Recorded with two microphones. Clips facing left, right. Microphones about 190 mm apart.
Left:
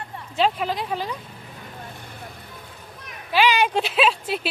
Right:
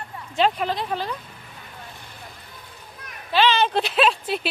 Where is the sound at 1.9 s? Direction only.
55° left (ahead or behind).